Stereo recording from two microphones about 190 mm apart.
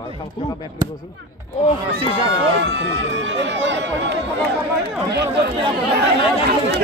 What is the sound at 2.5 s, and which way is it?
Speech, 65° right (ahead or behind).